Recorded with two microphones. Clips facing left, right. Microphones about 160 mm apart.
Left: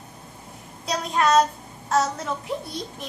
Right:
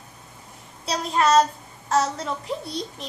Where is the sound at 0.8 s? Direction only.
Centre (ahead or behind).